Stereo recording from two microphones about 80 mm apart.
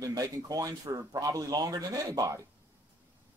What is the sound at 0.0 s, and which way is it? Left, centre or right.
Speech, right.